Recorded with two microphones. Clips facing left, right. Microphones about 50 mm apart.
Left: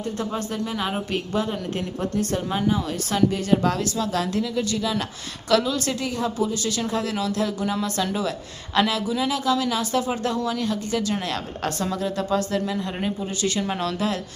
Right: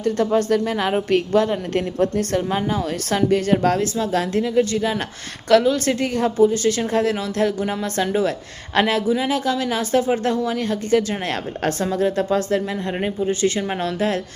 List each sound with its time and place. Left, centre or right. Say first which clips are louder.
0.0 s speech: right 9 dB; right